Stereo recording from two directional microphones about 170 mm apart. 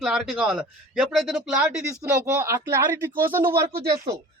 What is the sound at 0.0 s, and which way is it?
Speech, centre (ahead or behind).